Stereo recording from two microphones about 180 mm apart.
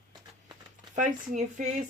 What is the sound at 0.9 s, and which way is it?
Speech, 40° right (ahead or behind).